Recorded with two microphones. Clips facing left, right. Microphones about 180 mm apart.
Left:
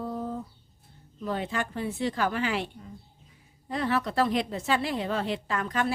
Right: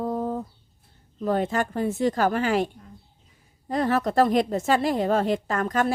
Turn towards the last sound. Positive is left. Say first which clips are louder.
# right 5 dB
turn(degrees=-45)  # may be behind; listen again after turning